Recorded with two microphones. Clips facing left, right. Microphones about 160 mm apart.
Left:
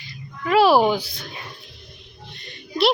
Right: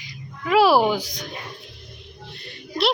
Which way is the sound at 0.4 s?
10° right (ahead or behind).